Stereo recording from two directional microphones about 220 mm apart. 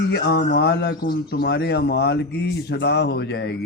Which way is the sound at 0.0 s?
50° left (ahead or behind).